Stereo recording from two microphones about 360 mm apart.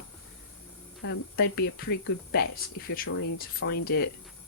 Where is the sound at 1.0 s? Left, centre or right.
Left.